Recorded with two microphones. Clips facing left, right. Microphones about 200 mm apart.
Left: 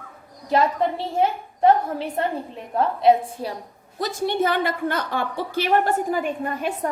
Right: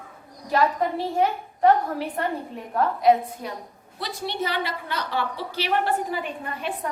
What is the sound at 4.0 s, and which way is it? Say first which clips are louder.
A woman's voice: left 7 dB; 50° left (ahead or behind).